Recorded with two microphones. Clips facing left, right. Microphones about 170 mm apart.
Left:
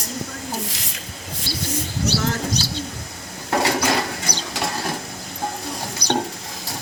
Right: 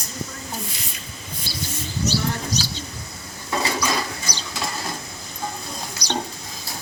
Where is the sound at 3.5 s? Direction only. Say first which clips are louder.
Left 4 dB; 70° left (ahead or behind).